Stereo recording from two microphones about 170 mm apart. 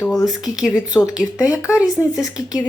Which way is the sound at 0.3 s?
5° right (ahead or behind).